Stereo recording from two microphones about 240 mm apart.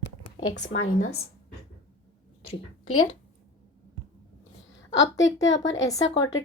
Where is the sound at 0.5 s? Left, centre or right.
Left.